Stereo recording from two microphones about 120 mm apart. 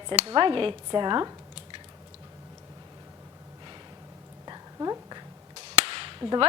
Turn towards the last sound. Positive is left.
turn(degrees=-40)  # may be behind; listen again after turning